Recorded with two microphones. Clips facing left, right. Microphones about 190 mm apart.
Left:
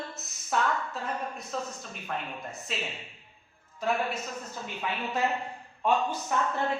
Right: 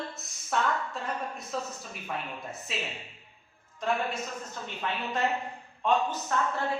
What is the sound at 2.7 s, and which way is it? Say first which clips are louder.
Speech: left 1 dB; centre (ahead or behind).